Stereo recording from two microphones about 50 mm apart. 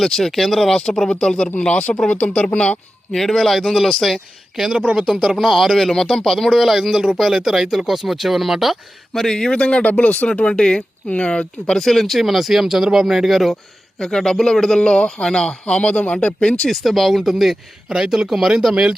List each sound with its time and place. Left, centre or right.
0.0 s speech: centre; by 2.7 s left
3.1 s speech: centre
9.2 s speech: centre
11.8 s speech: centre
14.0 s speech: centre
16.6 s speech: centre